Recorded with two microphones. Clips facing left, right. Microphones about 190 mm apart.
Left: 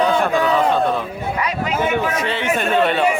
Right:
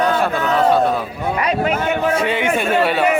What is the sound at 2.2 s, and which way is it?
Speech, 10° right (ahead or behind).